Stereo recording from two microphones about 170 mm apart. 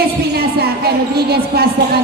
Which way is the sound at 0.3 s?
70° right (ahead or behind).